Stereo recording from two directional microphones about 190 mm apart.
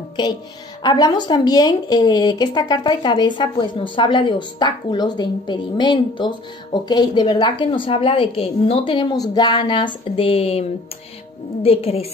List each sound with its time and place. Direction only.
0.8 s a woman's voice: 20° left (ahead or behind)